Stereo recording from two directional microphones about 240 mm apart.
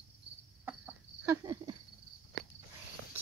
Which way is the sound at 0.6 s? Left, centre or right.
Centre.